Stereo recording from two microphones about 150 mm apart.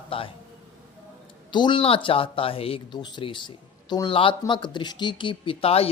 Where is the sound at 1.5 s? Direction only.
30° left (ahead or behind).